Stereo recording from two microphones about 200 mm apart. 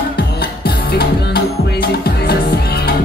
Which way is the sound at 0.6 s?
55° left (ahead or behind).